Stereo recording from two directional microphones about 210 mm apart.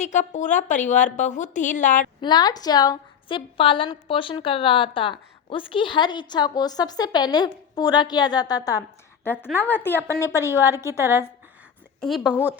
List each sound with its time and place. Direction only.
0.0 s a woman's voice: 35° left (ahead or behind)
2.2 s a woman's voice: 20° left (ahead or behind)
10.8 s a woman's voice: 10° right (ahead or behind)
11.9 s a woman's voice: centre (ahead or behind)